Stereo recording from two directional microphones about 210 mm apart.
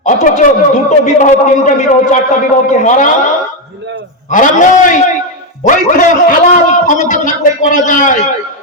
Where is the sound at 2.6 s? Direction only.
35° left (ahead or behind).